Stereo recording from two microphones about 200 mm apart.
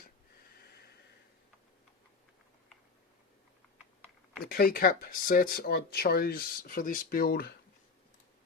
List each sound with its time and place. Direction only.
4.4 s speech: 50° left (ahead or behind)